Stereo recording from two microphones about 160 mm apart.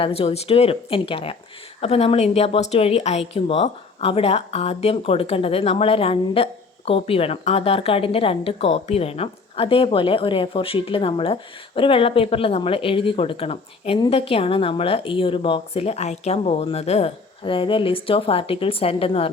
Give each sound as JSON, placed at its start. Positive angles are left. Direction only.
{"t": 0.0, "sound": "speech", "side_deg": 40}